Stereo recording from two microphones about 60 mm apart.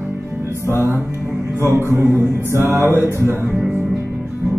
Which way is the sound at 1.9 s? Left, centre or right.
Right.